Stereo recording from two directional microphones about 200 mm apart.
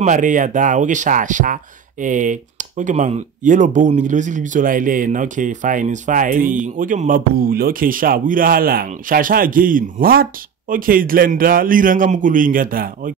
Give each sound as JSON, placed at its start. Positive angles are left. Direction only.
{"t": 0.0, "sound": "a man's voice", "side_deg": -40}